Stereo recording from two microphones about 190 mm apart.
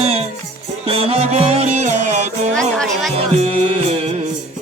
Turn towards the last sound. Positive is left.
turn(degrees=-30)  # may be behind; listen again after turning